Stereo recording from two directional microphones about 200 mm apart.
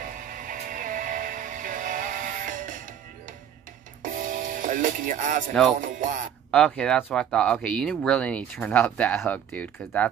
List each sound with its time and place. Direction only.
0.0 s music: 40° right (ahead or behind)
4.0 s music: 40° right (ahead or behind)
5.8 s speech: 40° right (ahead or behind)
6.5 s speech: 5° left (ahead or behind)